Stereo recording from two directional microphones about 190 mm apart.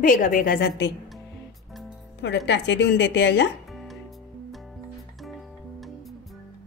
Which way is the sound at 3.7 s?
Centre (ahead or behind).